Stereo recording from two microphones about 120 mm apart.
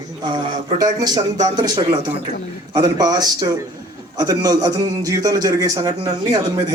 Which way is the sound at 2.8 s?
35° right (ahead or behind).